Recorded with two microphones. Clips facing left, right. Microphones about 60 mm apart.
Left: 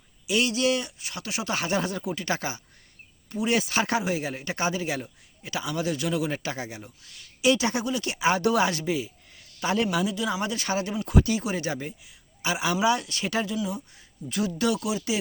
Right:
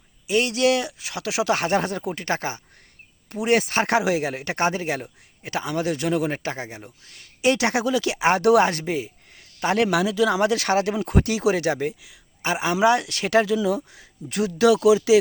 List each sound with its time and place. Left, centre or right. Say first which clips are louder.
0.3 s speech: right 3 dB; right
0.5 s speech: right 5 dB; right
3.4 s speech: right 5 dB; right
3.9 s speech: right 6 dB; right
7.7 s speech: right 6 dB; right
8.3 s speech: right 6 dB; right
8.6 s speech: right 3 dB; right
9.6 s speech: right 5 dB; right
12.4 s speech: right 3 dB; right
12.7 s speech: right 7 dB; right